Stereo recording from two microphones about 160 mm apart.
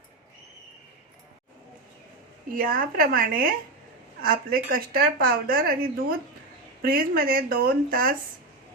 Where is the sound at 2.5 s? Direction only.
60° right (ahead or behind).